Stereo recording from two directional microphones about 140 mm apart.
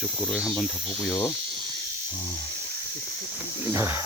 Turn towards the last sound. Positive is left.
turn(degrees=-15)  # may be behind; listen again after turning